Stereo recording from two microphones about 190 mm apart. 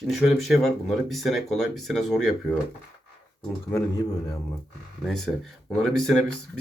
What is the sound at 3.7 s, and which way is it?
Speech, 20° left (ahead or behind).